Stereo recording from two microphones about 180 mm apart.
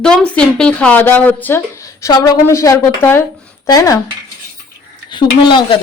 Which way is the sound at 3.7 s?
20° left (ahead or behind).